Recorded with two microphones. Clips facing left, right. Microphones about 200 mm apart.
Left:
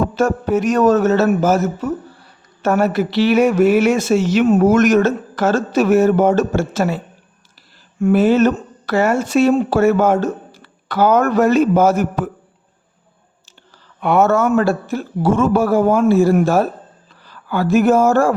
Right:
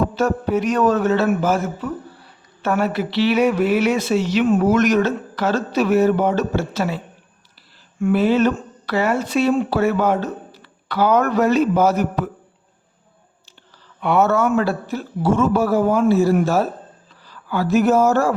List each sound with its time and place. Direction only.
0.2 s speech: 45° left (ahead or behind)
14.0 s speech: 45° left (ahead or behind)